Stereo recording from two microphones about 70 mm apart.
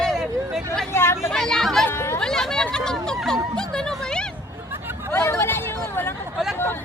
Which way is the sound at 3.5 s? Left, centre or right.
Centre.